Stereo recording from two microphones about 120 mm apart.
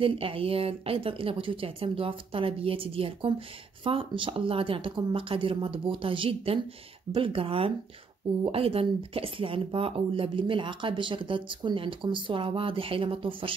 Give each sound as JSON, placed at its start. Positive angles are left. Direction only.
{"t": 0.0, "sound": "a woman's voice", "side_deg": -50}